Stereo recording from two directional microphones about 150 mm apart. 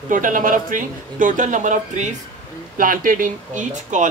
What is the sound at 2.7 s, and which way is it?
A woman's voice, 65° right (ahead or behind).